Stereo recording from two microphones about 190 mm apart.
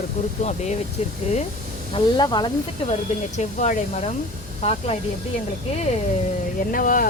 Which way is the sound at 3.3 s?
40° left (ahead or behind).